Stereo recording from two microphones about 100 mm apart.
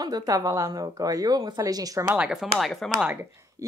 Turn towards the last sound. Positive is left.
turn(degrees=-20)  # may be behind; listen again after turning